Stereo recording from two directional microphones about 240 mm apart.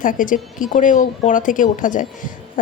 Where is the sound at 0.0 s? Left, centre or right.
Left.